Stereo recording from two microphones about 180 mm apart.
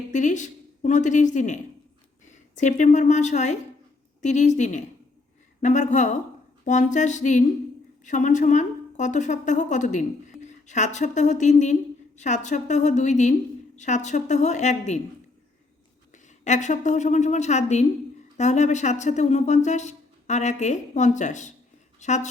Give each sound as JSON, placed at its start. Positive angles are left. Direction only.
{"t": 0.1, "sound": "a woman's voice", "side_deg": 45}
{"t": 16.1, "sound": "a woman's voice", "side_deg": 40}